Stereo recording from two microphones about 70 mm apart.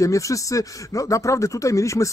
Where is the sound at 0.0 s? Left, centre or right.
Left.